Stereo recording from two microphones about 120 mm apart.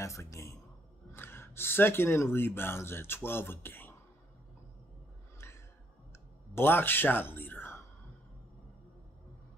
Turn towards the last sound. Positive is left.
turn(degrees=20)  # may be behind; listen again after turning